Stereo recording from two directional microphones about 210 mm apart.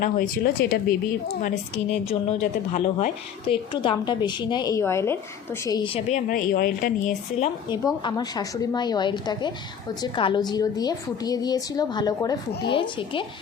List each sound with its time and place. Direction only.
0.0 s a woman's voice: 40° left (ahead or behind)
8.0 s a woman's voice: 20° left (ahead or behind)